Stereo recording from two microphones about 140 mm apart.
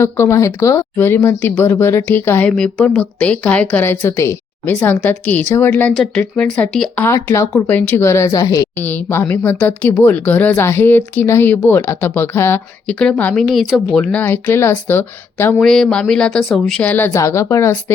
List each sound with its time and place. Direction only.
0.0 s a woman's voice: 20° left (ahead or behind)
8.8 s speech: 10° left (ahead or behind)
13.5 s speech: centre (ahead or behind); by 15.5 s 15° left (ahead or behind)
15.6 s speech: 5° left (ahead or behind); by 17.9 s 20° left (ahead or behind)